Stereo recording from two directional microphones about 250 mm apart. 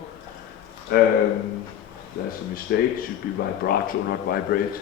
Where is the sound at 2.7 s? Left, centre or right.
Left.